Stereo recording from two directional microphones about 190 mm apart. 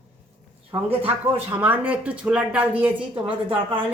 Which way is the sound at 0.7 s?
30° right (ahead or behind).